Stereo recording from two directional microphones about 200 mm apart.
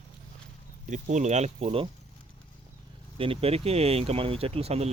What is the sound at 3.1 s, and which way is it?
Speech, 25° right (ahead or behind).